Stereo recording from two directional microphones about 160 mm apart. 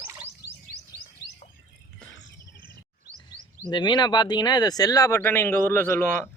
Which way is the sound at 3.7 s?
25° left (ahead or behind).